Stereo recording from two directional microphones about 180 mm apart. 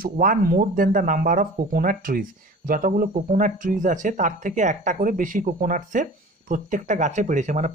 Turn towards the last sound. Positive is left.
turn(degrees=-45)  # may be behind; listen again after turning